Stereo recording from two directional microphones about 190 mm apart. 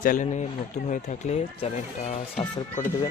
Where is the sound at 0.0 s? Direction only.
45° left (ahead or behind).